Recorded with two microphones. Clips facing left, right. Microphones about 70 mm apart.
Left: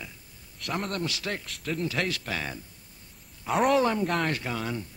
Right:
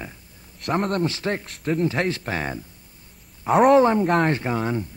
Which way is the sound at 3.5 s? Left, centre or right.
Right.